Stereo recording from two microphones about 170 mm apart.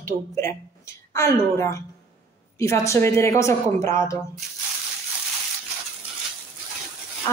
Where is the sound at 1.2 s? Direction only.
15° left (ahead or behind).